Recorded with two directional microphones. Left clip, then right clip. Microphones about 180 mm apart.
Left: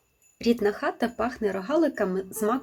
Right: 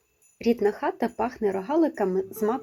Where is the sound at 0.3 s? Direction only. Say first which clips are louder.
Right 1 dB; 20° right (ahead or behind).